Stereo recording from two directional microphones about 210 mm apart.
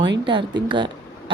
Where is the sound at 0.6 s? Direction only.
25° right (ahead or behind).